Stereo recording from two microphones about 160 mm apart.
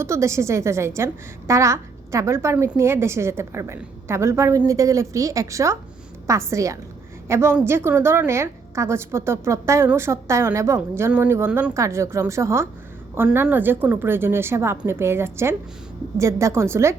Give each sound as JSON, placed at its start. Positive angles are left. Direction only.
{"t": 0.0, "sound": "a woman's voice", "side_deg": -15}